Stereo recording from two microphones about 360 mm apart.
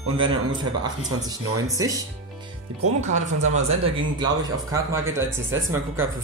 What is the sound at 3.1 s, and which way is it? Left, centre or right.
Speech, centre.